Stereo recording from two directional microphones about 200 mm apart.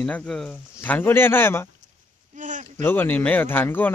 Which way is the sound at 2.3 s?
40° right (ahead or behind).